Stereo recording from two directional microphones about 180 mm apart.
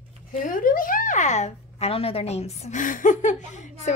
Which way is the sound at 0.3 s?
50° left (ahead or behind).